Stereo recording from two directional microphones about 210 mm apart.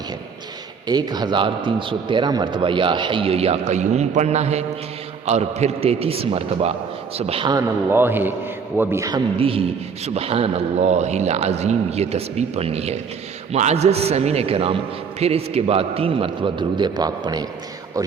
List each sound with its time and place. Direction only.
0.9 s a man's voice: 20° right (ahead or behind)
7.9 s a man's voice: 10° right (ahead or behind)